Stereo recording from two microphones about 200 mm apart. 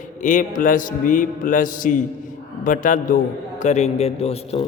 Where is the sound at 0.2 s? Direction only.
40° left (ahead or behind).